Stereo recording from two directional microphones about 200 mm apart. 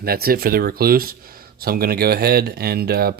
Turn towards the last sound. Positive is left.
turn(degrees=-50)  # may be behind; listen again after turning